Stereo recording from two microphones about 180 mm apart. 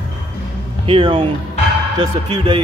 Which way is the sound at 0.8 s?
30° right (ahead or behind).